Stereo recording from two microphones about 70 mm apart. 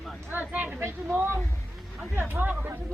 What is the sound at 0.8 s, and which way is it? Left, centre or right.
Speech, right.